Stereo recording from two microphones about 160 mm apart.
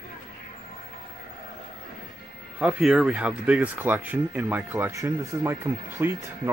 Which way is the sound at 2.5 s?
5° right (ahead or behind).